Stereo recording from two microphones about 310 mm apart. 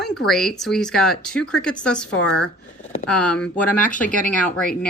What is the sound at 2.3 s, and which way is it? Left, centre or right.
Speech, left.